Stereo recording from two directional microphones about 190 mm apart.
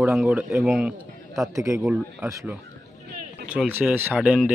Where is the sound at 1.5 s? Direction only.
15° right (ahead or behind).